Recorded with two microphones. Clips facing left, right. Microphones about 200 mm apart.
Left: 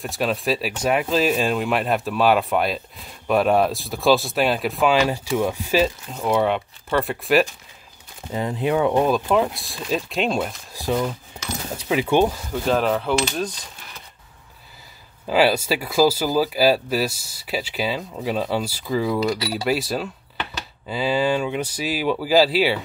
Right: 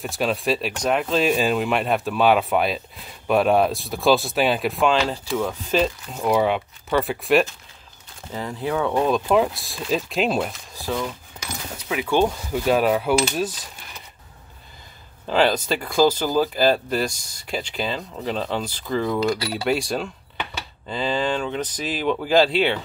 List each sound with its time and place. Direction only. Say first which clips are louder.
0.0 s speech: even; centre (ahead or behind)
8.3 s speech: left 4 dB; 20° left (ahead or behind)
9.0 s speech: even; centre (ahead or behind)
10.7 s speech: left 4 dB; 15° left (ahead or behind)
11.9 s speech: left 3 dB; 30° left (ahead or behind)
12.3 s speech: right 1 dB; 5° right (ahead or behind)
15.2 s speech: left 1 dB; 10° left (ahead or behind)